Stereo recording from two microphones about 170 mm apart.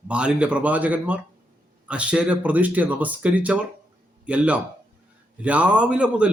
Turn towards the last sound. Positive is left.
turn(degrees=-5)  # may be behind; listen again after turning